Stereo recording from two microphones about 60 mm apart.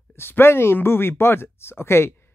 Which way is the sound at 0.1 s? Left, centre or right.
Left.